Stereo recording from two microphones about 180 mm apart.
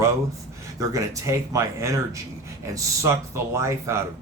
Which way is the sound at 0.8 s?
20° right (ahead or behind).